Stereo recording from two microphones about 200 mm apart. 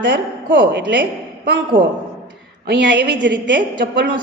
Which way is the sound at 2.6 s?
60° right (ahead or behind).